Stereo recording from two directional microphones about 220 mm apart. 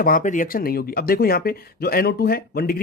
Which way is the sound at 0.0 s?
40° left (ahead or behind).